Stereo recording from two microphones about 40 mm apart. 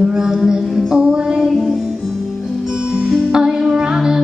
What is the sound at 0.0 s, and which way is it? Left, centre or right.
Music, centre.